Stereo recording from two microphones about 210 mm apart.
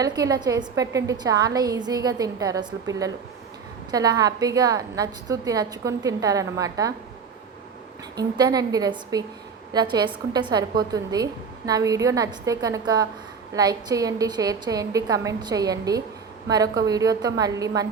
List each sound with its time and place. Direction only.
0.0 s a woman's voice: 15° right (ahead or behind)
8.1 s a woman's voice: 20° right (ahead or behind)